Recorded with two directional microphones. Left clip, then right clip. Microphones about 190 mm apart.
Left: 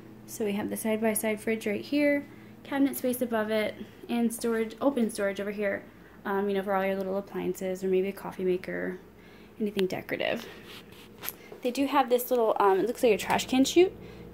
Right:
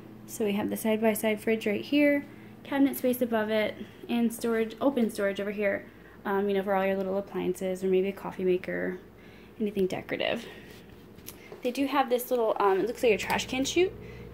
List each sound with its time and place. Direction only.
0.4 s a woman's voice: 5° right (ahead or behind)
11.6 s a woman's voice: 15° left (ahead or behind)